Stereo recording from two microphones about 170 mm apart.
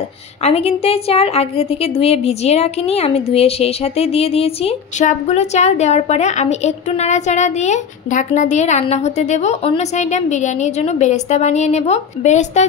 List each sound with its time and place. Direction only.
0.4 s a woman's voice: 40° left (ahead or behind)